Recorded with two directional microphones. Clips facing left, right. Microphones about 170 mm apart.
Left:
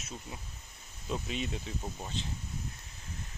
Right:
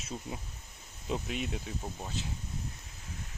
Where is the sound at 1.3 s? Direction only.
5° right (ahead or behind).